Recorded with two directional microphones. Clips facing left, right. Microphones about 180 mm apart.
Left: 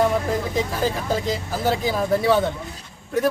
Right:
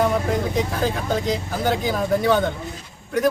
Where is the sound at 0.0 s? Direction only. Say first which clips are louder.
Even; centre (ahead or behind).